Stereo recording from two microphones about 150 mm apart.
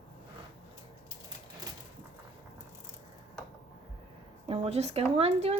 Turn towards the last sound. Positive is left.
turn(degrees=-40)  # may be behind; listen again after turning